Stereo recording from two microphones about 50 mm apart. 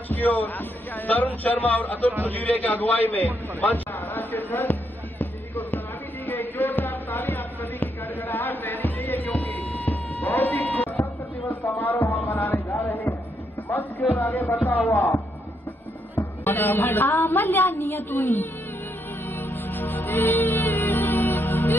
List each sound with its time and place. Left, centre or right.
0.1 s a man's voice: left
3.7 s a sound: left
5.2 s music: left
6.2 s a sound: left
11.6 s music: left
12.4 s a sound: left
13.7 s music: left
14.6 s speech: left
14.9 s speech: left
16.4 s a woman's voice: left
19.3 s music: left